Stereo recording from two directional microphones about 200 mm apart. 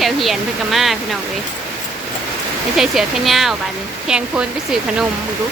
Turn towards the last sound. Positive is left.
turn(degrees=-5)  # may be behind; listen again after turning